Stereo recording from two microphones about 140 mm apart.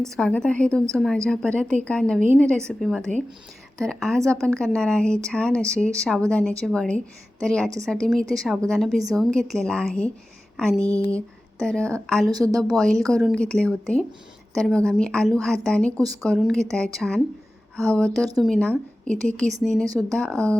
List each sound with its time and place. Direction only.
0.0 s a woman's voice: 5° left (ahead or behind)
12.2 s a woman's voice: 25° right (ahead or behind)
12.6 s a woman's voice: centre (ahead or behind)